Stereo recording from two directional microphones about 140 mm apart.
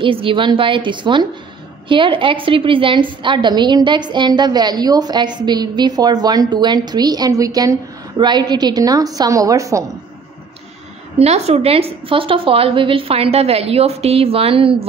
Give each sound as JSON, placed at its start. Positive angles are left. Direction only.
{"t": 0.0, "sound": "a woman's voice", "side_deg": -40}
{"t": 11.1, "sound": "a woman's voice", "side_deg": -50}